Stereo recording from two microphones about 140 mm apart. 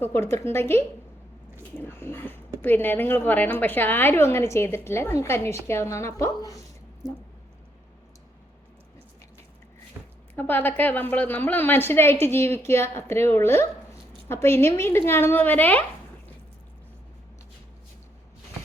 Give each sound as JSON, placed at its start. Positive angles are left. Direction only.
{"t": 0.0, "sound": "a woman's voice", "side_deg": 20}
{"t": 2.0, "sound": "a woman's voice", "side_deg": 15}
{"t": 10.0, "sound": "a sound", "side_deg": -20}
{"t": 10.3, "sound": "a woman's voice", "side_deg": 15}